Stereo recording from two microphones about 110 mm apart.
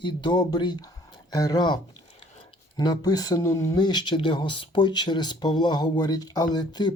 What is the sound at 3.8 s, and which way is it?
Speech, 40° left (ahead or behind).